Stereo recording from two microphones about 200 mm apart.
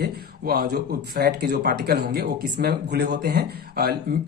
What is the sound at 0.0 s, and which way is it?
Speech, 50° right (ahead or behind).